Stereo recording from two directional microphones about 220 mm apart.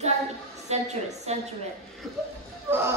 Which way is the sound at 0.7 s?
30° right (ahead or behind).